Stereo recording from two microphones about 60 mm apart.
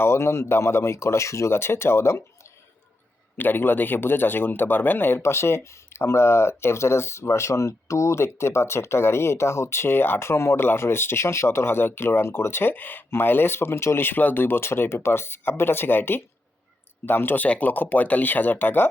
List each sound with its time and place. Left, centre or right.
0.0 s speech: left
3.3 s a man's voice: left
5.2 s a man's voice: left